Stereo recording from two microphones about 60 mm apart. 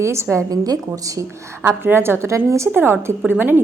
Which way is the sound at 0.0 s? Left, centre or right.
Right.